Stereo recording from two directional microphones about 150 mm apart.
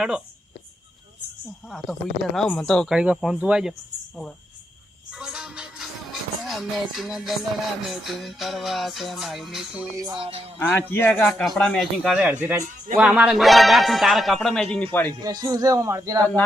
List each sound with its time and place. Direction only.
1.6 s music: centre (ahead or behind)
9.9 s music: 25° right (ahead or behind)
10.6 s speech: 10° left (ahead or behind)
11.3 s music: 5° left (ahead or behind)
15.2 s speech: 25° right (ahead or behind)